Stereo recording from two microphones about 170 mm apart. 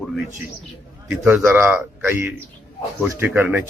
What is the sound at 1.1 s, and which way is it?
A man's voice, 10° right (ahead or behind).